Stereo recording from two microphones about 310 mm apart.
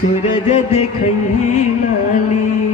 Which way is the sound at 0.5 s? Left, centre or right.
Left.